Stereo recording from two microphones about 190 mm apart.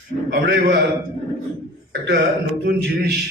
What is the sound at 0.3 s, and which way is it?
Speech, 70° right (ahead or behind).